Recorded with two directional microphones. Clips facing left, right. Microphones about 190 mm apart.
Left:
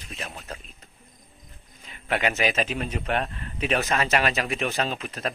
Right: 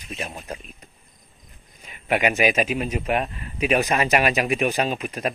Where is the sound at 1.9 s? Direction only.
15° right (ahead or behind).